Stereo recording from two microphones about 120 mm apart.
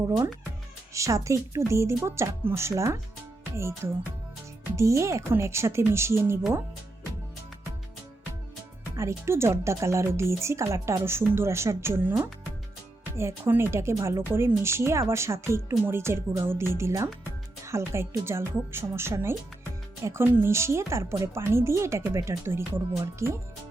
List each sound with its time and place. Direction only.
0.9 s speech: 25° right (ahead or behind)
4.8 s speech: 25° right (ahead or behind)
9.0 s speech: 25° right (ahead or behind)